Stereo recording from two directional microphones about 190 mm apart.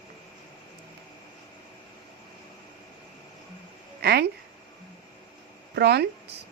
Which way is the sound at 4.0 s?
55° right (ahead or behind).